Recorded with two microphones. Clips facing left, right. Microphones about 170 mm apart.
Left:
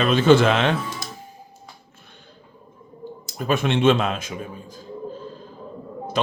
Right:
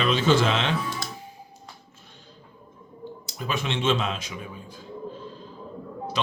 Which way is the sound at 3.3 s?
50° left (ahead or behind).